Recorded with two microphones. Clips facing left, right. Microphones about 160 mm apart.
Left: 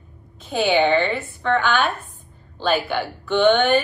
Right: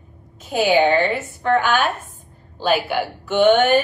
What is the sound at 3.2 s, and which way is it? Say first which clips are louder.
Speech: right 2 dB; 40° right (ahead or behind).